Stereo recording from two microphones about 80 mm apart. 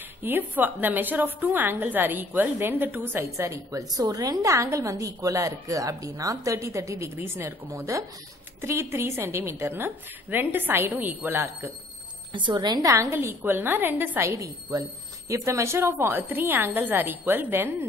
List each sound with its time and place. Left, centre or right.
0.2 s speech: right
3.3 s a woman's voice: right
12.3 s speech: right
12.8 s a woman's voice: right
13.4 s speech: right
14.2 s speech: right